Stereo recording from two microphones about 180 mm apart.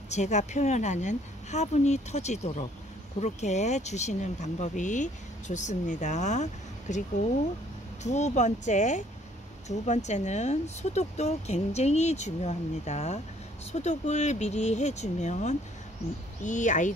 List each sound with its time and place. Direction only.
0.1 s speech: 40° left (ahead or behind)
8.0 s speech: 40° left (ahead or behind)